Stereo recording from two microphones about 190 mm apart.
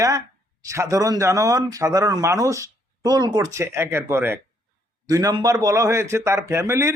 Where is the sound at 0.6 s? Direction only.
15° right (ahead or behind).